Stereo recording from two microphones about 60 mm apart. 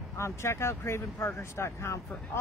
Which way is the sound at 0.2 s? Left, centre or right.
Left.